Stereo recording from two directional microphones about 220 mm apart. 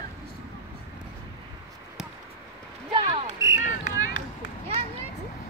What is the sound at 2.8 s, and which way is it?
Basketball bounce, 20° right (ahead or behind).